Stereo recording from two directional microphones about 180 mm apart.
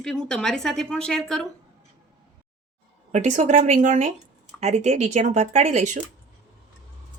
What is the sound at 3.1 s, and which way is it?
Speech, 40° right (ahead or behind).